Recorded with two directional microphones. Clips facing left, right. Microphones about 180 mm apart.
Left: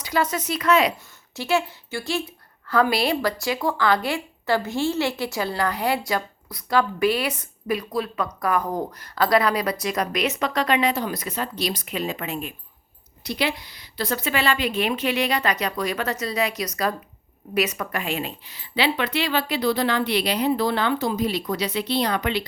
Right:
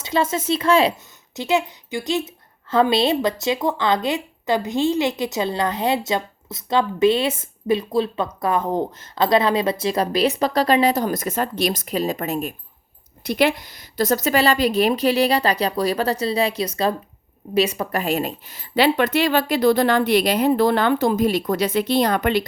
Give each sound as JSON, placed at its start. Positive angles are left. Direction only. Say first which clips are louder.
{"t": 0.0, "sound": "a woman's voice", "louder": "right 3 dB", "side_deg": -25}